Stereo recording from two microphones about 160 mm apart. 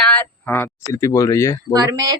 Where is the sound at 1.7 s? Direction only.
25° right (ahead or behind).